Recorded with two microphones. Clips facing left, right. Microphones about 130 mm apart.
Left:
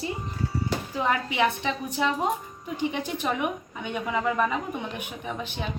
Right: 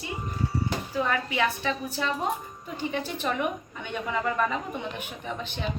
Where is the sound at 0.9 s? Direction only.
20° left (ahead or behind).